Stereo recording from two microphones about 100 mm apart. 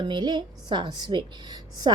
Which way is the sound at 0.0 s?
50° right (ahead or behind).